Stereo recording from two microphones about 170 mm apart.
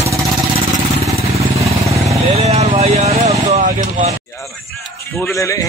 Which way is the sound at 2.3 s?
40° right (ahead or behind).